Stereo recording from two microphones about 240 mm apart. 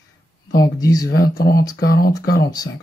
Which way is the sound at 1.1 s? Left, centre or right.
Left.